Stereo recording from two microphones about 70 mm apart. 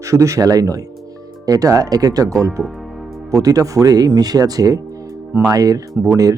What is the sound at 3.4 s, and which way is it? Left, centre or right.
Speech, right.